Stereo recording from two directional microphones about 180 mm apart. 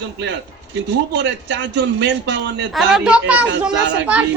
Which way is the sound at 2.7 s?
5° right (ahead or behind).